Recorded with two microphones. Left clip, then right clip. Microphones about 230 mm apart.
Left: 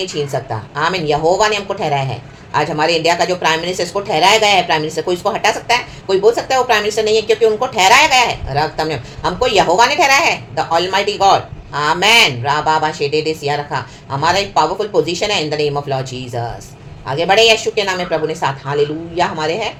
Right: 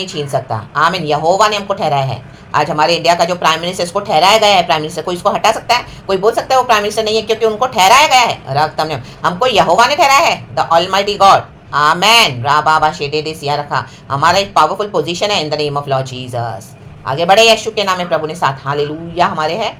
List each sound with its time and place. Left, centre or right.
0.2 s speech: centre